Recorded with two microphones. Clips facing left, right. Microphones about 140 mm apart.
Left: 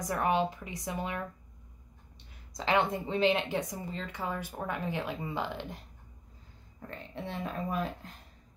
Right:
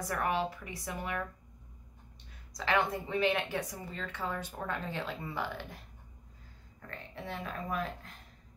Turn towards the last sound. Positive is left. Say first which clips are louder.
# left 3 dB
turn(degrees=25)  # may be behind; listen again after turning